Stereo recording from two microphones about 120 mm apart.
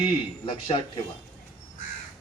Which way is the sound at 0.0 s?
45° left (ahead or behind).